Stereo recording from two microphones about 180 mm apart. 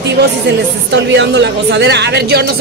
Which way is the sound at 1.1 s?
75° right (ahead or behind).